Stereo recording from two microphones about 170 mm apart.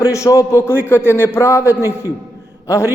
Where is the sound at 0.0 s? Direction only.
20° left (ahead or behind).